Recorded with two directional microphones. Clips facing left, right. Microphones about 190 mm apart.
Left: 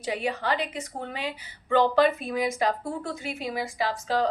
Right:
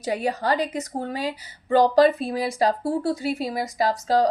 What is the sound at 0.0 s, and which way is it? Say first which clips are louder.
Speech: right 4 dB; 40° right (ahead or behind).